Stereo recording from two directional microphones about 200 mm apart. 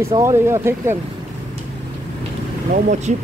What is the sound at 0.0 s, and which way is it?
Speech, 15° right (ahead or behind).